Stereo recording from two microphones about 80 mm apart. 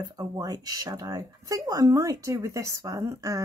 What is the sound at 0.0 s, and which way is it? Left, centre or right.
Speech, right.